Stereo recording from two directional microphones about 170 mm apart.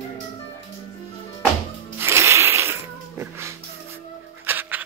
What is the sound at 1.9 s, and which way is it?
Music, 15° right (ahead or behind).